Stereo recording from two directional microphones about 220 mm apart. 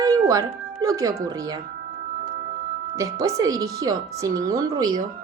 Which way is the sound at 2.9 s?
15° right (ahead or behind).